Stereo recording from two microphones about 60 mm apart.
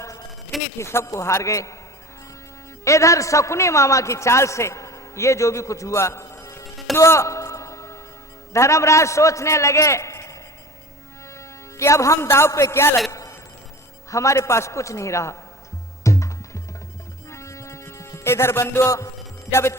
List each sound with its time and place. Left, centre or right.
0.0 s a sound: left
0.8 s a man's voice: left
2.8 s a man's voice: left
6.3 s music: left
6.9 s a sound: left
8.5 s a man's voice: left
11.3 s a man's voice: left
13.1 s a sound: left
14.1 s a man's voice: left
16.0 s music: left
18.8 s a man's voice: left
19.5 s a man's voice: left